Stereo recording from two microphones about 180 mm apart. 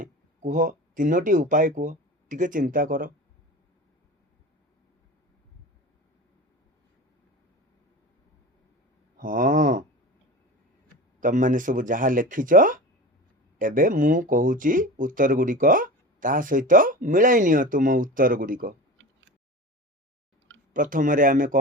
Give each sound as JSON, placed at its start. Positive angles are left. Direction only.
{"t": 0.0, "sound": "speech", "side_deg": -45}
{"t": 9.1, "sound": "a sound", "side_deg": -50}
{"t": 11.2, "sound": "speech", "side_deg": -45}
{"t": 20.7, "sound": "speech", "side_deg": -50}